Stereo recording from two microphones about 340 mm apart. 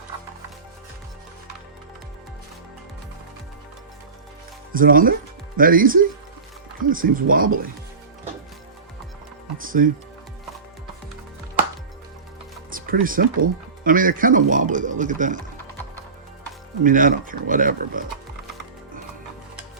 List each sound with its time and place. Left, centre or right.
4.7 s speech: right
9.6 s speech: right
12.7 s music: right
13.4 s speech: right
16.8 s speech: right